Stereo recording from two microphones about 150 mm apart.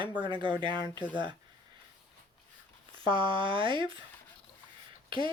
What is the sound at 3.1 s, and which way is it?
Speech, 35° right (ahead or behind).